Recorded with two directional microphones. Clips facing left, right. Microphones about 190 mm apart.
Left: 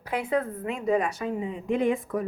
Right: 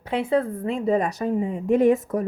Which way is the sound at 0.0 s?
25° right (ahead or behind).